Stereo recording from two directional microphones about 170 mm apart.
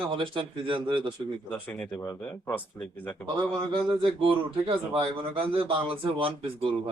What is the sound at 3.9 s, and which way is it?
Speech, 30° right (ahead or behind).